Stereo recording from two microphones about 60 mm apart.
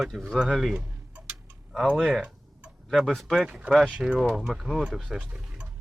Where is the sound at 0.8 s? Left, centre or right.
Centre.